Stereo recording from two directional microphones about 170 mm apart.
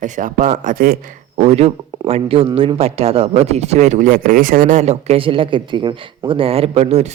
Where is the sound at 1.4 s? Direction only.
40° right (ahead or behind).